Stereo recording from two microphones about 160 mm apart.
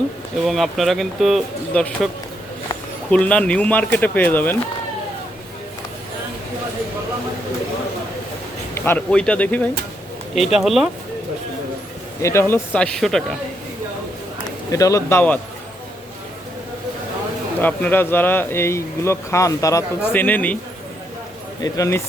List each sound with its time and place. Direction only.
0.4 s speech: centre (ahead or behind)
3.1 s speech: 10° left (ahead or behind)
8.7 s speech: 15° left (ahead or behind)
10.3 s speech: centre (ahead or behind)
12.2 s speech: 15° left (ahead or behind)
14.7 s speech: 20° left (ahead or behind)
17.6 s speech: 10° left (ahead or behind)
21.6 s speech: 20° left (ahead or behind)